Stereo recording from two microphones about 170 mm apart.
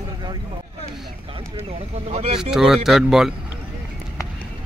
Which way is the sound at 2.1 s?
35° right (ahead or behind).